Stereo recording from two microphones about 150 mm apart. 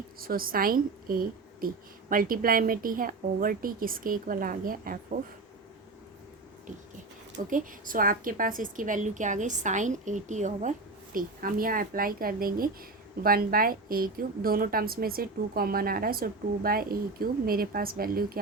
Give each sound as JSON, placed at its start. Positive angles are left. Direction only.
{"t": 0.2, "sound": "speech", "side_deg": -75}
{"t": 7.5, "sound": "a woman's voice", "side_deg": -65}